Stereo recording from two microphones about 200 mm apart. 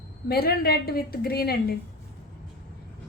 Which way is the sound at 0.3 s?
50° left (ahead or behind).